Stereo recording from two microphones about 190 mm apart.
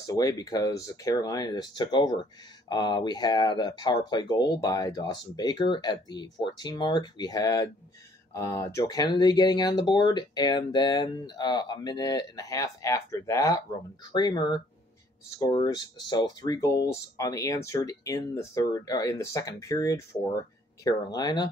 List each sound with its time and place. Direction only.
0.0 s speech: 20° left (ahead or behind)